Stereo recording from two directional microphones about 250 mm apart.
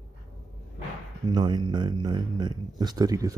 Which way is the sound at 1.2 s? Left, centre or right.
Centre.